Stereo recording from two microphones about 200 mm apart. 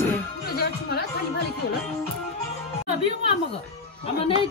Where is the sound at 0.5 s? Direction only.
50° left (ahead or behind).